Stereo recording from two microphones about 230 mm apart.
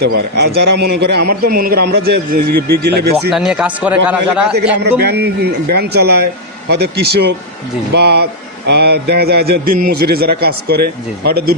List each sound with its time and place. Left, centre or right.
0.0 s speech: right
3.3 s speech: centre
4.8 s speech: right